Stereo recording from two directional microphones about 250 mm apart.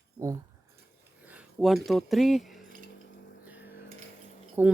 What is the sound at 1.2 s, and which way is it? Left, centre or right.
Speech, centre.